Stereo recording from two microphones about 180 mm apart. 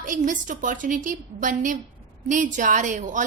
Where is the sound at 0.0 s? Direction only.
45° right (ahead or behind).